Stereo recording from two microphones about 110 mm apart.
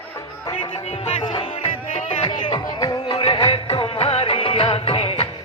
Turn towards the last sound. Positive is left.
turn(degrees=60)  # may be behind; listen again after turning